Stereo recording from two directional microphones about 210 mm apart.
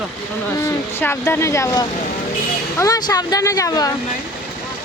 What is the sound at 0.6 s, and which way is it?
Speech, 10° left (ahead or behind).